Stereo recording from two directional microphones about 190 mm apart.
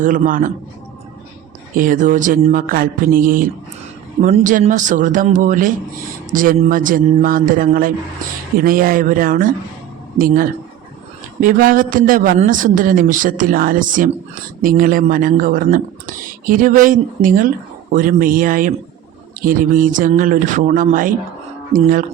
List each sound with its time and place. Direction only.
0.0 s speech: 45° right (ahead or behind)
1.7 s speech: 45° right (ahead or behind)